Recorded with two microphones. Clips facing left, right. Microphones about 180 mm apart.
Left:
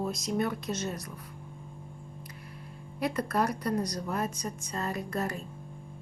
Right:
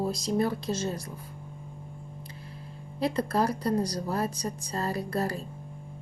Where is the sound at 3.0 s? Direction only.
30° right (ahead or behind).